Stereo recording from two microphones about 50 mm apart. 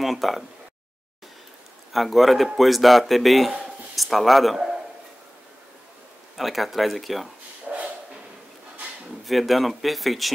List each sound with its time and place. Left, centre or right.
0.0 s speech: centre
1.9 s speech: centre
6.3 s speech: centre
7.7 s a sound: centre
9.2 s speech: centre